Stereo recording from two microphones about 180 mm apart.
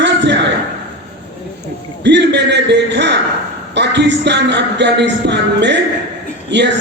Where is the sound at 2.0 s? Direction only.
75° right (ahead or behind).